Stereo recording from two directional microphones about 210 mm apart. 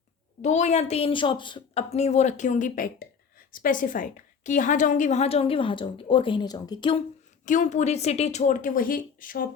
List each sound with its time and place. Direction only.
0.4 s a woman's voice: 35° left (ahead or behind)
7.4 s speech: 35° left (ahead or behind)